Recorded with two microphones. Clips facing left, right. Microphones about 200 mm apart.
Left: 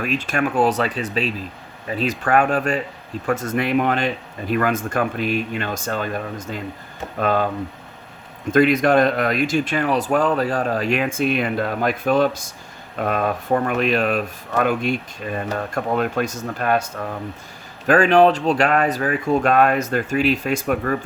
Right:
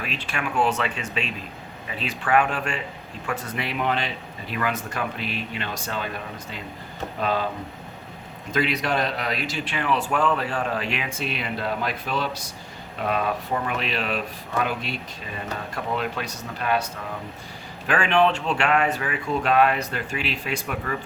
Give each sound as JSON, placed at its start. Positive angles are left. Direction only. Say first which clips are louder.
{"t": 0.0, "sound": "speech", "louder": "left 9 dB", "side_deg": 45}
{"t": 8.5, "sound": "speech", "louder": "left 9 dB", "side_deg": 50}